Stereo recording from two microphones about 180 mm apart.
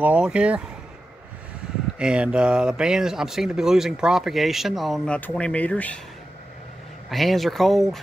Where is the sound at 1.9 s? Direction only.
5° right (ahead or behind).